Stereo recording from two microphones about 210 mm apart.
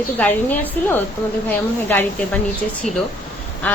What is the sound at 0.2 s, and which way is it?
A woman's voice, 10° left (ahead or behind).